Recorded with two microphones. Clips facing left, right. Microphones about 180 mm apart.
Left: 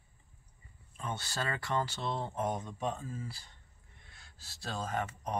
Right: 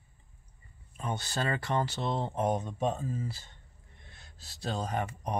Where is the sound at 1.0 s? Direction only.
15° right (ahead or behind).